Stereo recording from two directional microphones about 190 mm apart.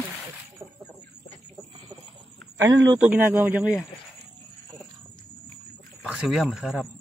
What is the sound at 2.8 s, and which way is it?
Speech, 10° right (ahead or behind).